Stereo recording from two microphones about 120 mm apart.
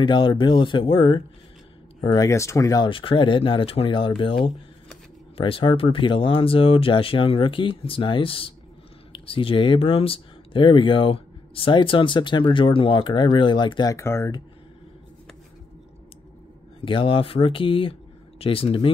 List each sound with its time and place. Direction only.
0.0 s speech: 40° left (ahead or behind)
2.9 s speech: 45° left (ahead or behind)
13.9 s speech: 25° left (ahead or behind)
16.8 s speech: 45° left (ahead or behind)